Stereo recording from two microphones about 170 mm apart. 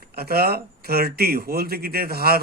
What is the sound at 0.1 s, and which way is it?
Speech, 65° right (ahead or behind).